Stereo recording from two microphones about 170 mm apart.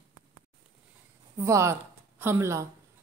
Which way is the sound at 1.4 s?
15° right (ahead or behind).